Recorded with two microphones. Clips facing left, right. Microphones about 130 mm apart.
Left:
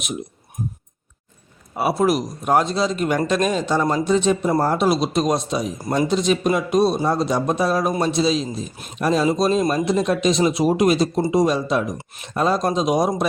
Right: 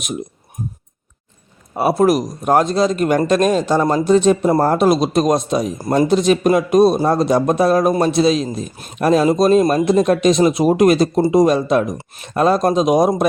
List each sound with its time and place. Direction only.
1.7 s speech: 45° right (ahead or behind)